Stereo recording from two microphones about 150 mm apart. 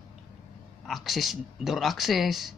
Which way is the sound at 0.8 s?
Centre (ahead or behind).